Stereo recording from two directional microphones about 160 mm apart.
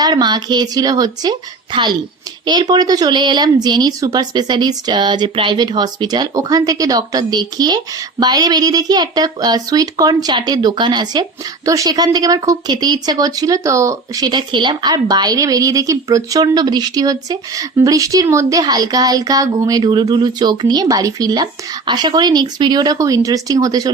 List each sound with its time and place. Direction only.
0.0 s a woman's voice: 25° right (ahead or behind)